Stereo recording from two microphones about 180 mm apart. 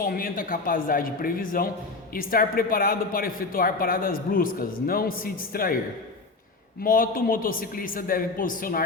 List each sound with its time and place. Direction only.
0.0 s speech: 55° left (ahead or behind)
6.8 s speech: 50° left (ahead or behind)